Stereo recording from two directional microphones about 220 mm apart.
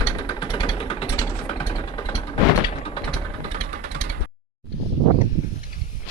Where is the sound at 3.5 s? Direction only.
30° right (ahead or behind).